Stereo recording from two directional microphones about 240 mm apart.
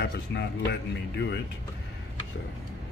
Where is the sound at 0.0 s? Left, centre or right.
Left.